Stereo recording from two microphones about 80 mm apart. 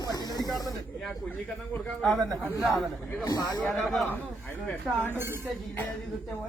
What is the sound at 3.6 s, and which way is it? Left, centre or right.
Speech, centre.